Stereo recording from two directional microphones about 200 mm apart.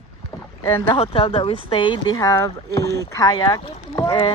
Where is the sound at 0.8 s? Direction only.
30° left (ahead or behind).